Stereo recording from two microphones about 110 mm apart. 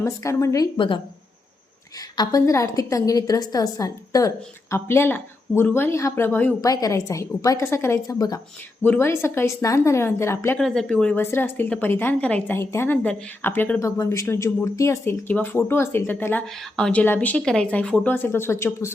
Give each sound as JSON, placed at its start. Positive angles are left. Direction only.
{"t": 0.0, "sound": "speech", "side_deg": 30}
{"t": 0.8, "sound": "a woman's voice", "side_deg": 50}
{"t": 2.0, "sound": "a woman's voice", "side_deg": 35}
{"t": 4.7, "sound": "speech", "side_deg": 20}
{"t": 6.6, "sound": "a woman's voice", "side_deg": 30}
{"t": 8.8, "sound": "speech", "side_deg": 20}
{"t": 10.6, "sound": "speech", "side_deg": 5}
{"t": 11.2, "sound": "speech", "side_deg": 20}
{"t": 16.5, "sound": "speech", "side_deg": 5}